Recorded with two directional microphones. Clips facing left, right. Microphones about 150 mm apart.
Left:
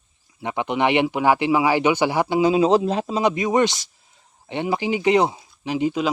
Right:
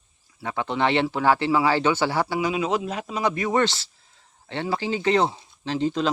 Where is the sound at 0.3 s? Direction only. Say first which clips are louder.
Left 3 dB; 20° left (ahead or behind).